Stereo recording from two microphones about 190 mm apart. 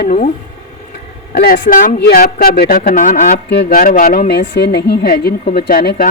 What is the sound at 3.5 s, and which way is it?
Speech, 60° left (ahead or behind).